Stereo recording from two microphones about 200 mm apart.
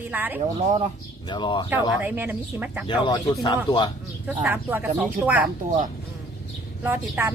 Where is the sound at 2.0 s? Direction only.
10° right (ahead or behind).